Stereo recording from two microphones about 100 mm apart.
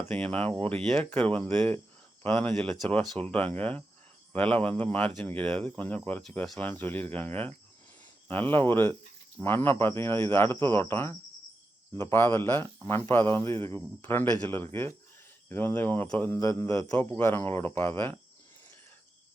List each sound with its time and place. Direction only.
0.1 s speech: 15° left (ahead or behind)
6.6 s speech: 20° left (ahead or behind)
16.4 s speech: 30° left (ahead or behind)
16.9 s speech: 20° left (ahead or behind)